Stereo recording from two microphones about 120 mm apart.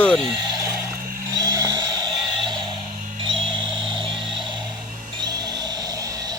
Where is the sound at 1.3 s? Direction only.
30° right (ahead or behind).